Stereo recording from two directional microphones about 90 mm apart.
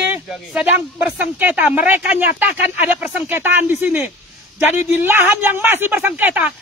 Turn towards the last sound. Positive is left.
turn(degrees=-15)  # may be behind; listen again after turning